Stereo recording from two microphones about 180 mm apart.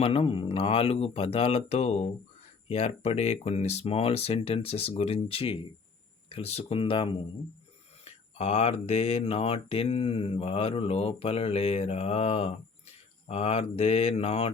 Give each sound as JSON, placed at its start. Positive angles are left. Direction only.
{"t": 0.0, "sound": "speech", "side_deg": 30}